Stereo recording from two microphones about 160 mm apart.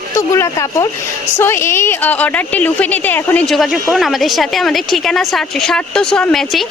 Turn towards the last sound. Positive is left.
turn(degrees=0)  # may be behind; listen again after turning